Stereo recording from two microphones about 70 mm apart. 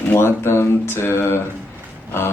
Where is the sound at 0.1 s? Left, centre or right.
Left.